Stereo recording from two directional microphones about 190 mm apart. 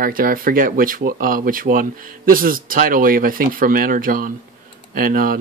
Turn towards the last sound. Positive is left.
turn(degrees=-50)  # may be behind; listen again after turning